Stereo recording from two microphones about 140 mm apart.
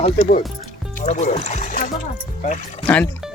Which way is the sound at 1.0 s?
55° left (ahead or behind).